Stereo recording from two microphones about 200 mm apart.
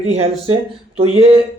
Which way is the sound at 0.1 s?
30° right (ahead or behind).